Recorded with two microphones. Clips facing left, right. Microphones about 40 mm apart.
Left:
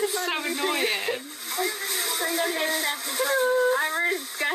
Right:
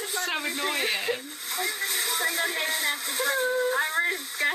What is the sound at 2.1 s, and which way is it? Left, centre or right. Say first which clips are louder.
Speech: left 2 dB; right.